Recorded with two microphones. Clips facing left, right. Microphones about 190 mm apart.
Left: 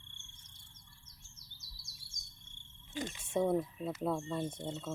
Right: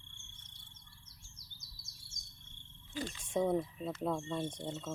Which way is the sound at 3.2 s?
5° left (ahead or behind).